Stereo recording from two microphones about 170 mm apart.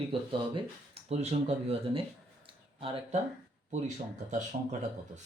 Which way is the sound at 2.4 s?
30° right (ahead or behind).